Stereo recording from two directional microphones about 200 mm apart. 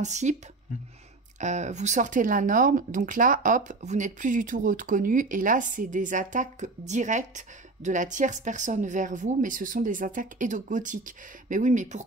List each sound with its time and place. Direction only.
0.0 s speech: 35° right (ahead or behind)
1.4 s speech: 35° right (ahead or behind)